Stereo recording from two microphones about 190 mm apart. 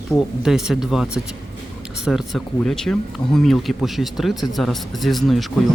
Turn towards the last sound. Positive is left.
turn(degrees=0)  # may be behind; listen again after turning